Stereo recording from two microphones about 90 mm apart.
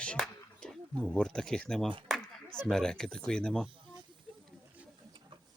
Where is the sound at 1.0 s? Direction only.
10° left (ahead or behind).